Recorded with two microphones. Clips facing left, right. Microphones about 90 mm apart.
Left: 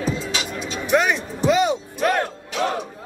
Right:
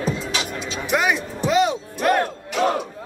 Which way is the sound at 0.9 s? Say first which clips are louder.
Left 2 dB; centre (ahead or behind).